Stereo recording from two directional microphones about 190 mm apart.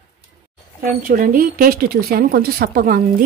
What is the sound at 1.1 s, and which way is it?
Speech, 45° right (ahead or behind).